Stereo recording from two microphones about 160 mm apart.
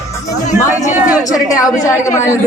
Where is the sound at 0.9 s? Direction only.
10° right (ahead or behind).